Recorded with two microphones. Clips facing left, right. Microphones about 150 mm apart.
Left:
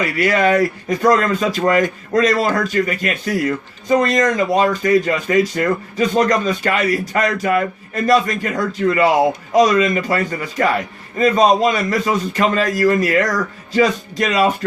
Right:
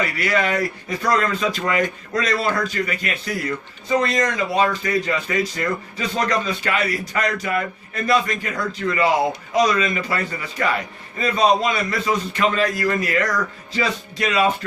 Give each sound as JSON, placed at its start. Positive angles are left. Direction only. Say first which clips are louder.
{"t": 0.0, "sound": "a man's voice", "louder": "left 5 dB", "side_deg": 40}